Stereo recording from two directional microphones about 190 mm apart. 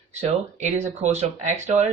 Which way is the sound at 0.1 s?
40° right (ahead or behind).